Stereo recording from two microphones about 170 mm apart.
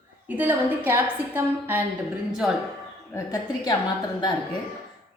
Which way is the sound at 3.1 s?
20° left (ahead or behind).